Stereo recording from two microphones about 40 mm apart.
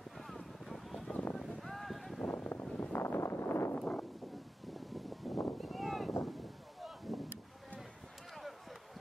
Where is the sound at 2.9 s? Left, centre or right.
Left.